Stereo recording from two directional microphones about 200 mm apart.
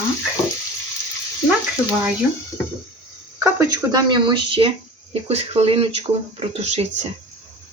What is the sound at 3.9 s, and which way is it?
Speech, 25° right (ahead or behind).